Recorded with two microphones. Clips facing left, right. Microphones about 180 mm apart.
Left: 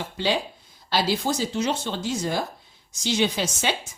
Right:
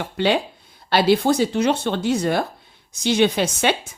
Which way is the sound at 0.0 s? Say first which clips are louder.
Right 5 dB; 60° right (ahead or behind).